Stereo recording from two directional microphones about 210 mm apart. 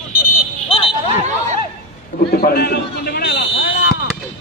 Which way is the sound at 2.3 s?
50° left (ahead or behind).